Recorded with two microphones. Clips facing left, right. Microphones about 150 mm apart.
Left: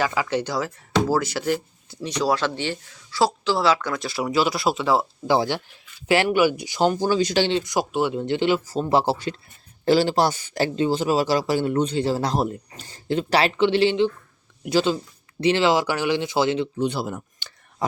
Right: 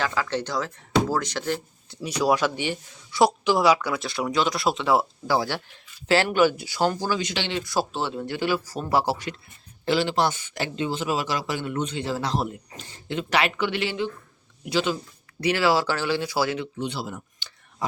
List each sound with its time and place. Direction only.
0.0 s speech: 10° left (ahead or behind)
2.0 s speech: 10° right (ahead or behind)
4.0 s speech: 5° left (ahead or behind)
5.3 s speech: 20° left (ahead or behind)
7.2 s speech: 35° left (ahead or behind)
7.6 s speech: 15° left (ahead or behind)
9.8 s speech: 40° left (ahead or behind)
14.6 s speech: 45° left (ahead or behind)
15.4 s speech: 25° left (ahead or behind)
16.7 s a sound: 45° left (ahead or behind)